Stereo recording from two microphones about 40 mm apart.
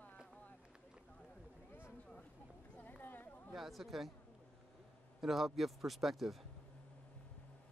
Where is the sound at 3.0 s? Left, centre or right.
Left.